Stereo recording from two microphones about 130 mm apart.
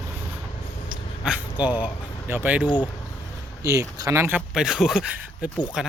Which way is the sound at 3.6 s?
25° right (ahead or behind).